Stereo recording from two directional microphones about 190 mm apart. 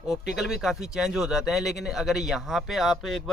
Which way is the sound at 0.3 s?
Centre (ahead or behind).